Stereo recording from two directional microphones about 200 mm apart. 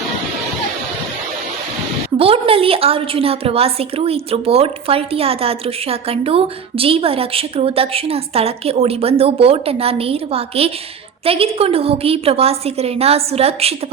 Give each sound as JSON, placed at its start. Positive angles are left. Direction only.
{"t": 2.1, "sound": "a woman's voice", "side_deg": -30}